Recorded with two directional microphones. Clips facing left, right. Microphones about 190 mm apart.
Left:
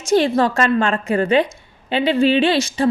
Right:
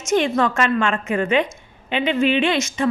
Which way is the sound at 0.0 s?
35° left (ahead or behind).